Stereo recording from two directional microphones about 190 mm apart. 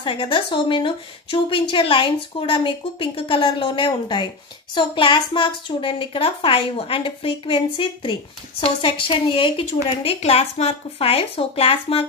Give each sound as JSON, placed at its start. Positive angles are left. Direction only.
{"t": 0.0, "sound": "a child's voice", "side_deg": 25}